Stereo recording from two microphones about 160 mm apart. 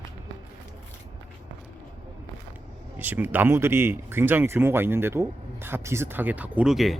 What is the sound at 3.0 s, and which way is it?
Speech, 10° right (ahead or behind).